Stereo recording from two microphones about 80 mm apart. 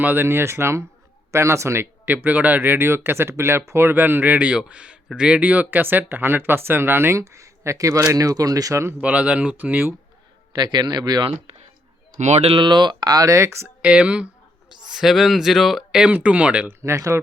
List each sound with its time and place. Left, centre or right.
0.0 s speech: right
2.0 s speech: right
9.0 s speech: centre
10.5 s speech: right
12.5 s speech: right
13.8 s speech: centre
16.8 s speech: right